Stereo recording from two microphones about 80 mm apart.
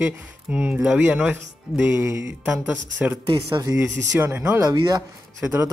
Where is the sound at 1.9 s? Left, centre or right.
Right.